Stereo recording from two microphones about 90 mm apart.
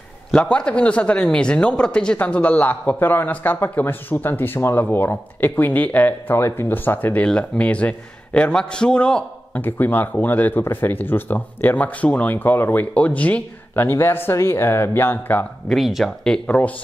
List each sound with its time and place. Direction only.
0.3 s a man's voice: 10° left (ahead or behind)
15.7 s speech: centre (ahead or behind)
16.4 s a man's voice: 15° left (ahead or behind)